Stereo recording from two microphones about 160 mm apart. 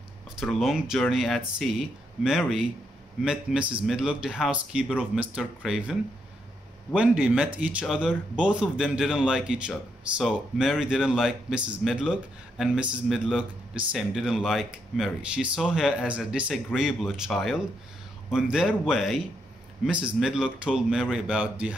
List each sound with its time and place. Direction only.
0.4 s speech: centre (ahead or behind)